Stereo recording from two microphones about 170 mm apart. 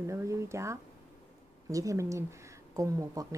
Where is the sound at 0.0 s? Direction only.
15° right (ahead or behind).